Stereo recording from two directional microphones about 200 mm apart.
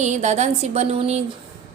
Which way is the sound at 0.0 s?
35° right (ahead or behind).